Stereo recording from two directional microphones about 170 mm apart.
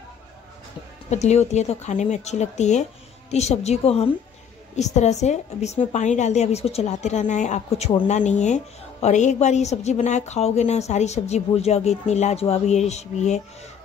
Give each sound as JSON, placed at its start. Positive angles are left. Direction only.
{"t": 1.1, "sound": "a woman's voice", "side_deg": 40}